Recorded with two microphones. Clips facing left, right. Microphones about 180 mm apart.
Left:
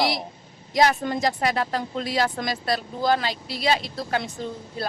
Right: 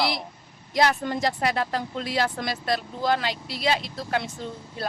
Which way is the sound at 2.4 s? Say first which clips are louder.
Left 1 dB; 40° left (ahead or behind).